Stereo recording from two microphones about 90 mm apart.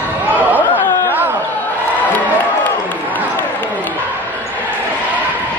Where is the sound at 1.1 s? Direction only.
25° right (ahead or behind).